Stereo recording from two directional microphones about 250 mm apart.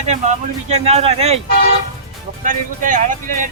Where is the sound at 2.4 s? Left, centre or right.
Right.